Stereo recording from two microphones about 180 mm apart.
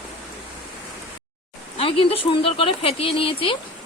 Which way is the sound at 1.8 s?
30° left (ahead or behind).